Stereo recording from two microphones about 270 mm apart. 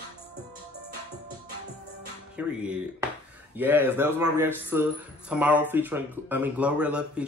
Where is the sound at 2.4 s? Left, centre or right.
Centre.